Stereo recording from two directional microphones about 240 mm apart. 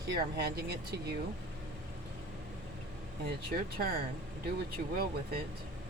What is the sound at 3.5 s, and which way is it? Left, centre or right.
Speech, right.